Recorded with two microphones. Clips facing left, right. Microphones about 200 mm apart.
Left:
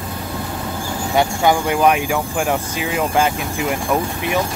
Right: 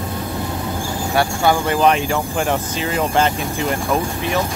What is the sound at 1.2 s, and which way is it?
Speech, 15° left (ahead or behind).